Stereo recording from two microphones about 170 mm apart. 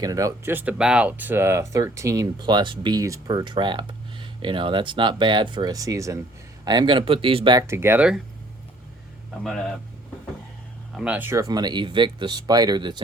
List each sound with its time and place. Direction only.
0.0 s speech: 20° right (ahead or behind)
7.7 s speech: 15° right (ahead or behind)
10.9 s speech: 10° right (ahead or behind); by 13.0 s 25° right (ahead or behind)